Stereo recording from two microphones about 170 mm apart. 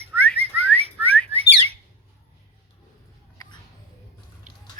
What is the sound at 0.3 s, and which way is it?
Bird, 35° right (ahead or behind).